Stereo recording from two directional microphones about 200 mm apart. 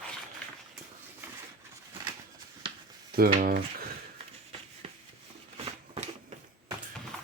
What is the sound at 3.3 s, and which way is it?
Speech, 45° right (ahead or behind).